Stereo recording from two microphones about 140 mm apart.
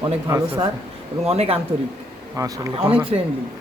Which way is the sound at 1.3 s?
50° right (ahead or behind).